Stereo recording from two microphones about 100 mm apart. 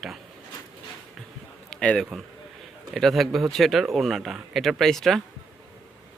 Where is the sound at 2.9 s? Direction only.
Centre (ahead or behind).